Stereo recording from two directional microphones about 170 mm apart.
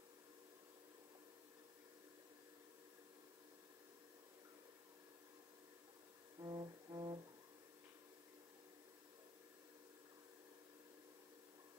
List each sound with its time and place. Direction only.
6.4 s music: 25° right (ahead or behind)